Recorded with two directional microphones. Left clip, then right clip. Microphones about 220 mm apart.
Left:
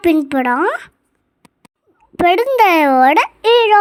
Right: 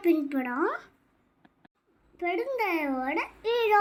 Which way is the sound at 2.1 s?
45° left (ahead or behind).